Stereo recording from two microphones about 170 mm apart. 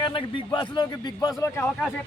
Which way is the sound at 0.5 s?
25° left (ahead or behind).